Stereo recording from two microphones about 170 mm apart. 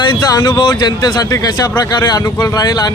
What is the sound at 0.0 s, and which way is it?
Speech, 25° left (ahead or behind).